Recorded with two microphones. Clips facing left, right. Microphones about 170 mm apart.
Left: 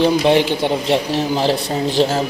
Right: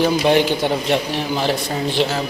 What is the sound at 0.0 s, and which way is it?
Speech, 25° left (ahead or behind).